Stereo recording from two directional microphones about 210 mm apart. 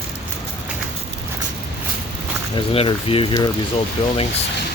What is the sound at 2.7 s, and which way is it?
Speech, 25° left (ahead or behind).